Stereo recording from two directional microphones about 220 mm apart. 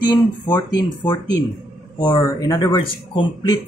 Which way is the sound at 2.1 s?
15° left (ahead or behind).